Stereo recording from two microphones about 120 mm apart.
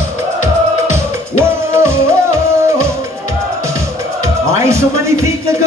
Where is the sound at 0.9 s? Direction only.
20° right (ahead or behind).